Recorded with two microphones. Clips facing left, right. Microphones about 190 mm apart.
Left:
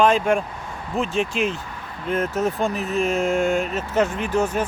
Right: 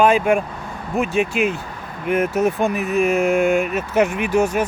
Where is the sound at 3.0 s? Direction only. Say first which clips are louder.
Right 4 dB; 70° right (ahead or behind).